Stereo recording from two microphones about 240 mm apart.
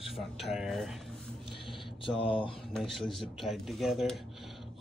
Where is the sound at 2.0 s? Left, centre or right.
Left.